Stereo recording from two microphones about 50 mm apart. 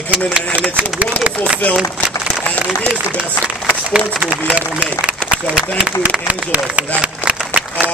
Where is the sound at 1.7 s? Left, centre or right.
Right.